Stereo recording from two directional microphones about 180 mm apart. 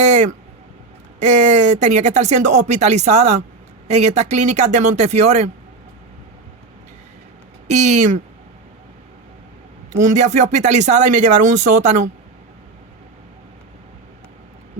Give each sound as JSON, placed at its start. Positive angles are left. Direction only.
{"t": 0.0, "sound": "a sound", "side_deg": -40}
{"t": 1.2, "sound": "speech", "side_deg": -40}
{"t": 7.7, "sound": "speech", "side_deg": -40}
{"t": 9.9, "sound": "speech", "side_deg": -45}